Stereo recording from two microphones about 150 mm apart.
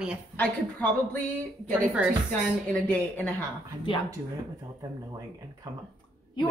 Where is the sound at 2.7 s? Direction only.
10° left (ahead or behind).